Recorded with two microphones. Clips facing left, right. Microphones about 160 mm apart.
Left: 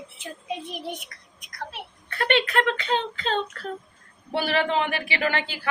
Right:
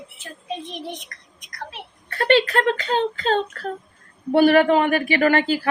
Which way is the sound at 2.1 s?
35° right (ahead or behind).